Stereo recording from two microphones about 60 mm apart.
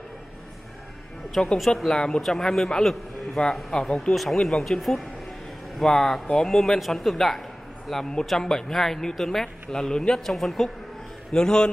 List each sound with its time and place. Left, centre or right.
1.4 s speech: centre
4.1 s speech: centre
11.3 s speech: centre